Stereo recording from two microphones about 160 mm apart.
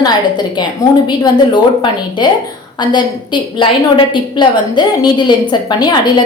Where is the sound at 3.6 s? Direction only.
30° left (ahead or behind).